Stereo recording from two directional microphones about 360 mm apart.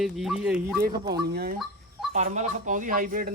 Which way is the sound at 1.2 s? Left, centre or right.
Right.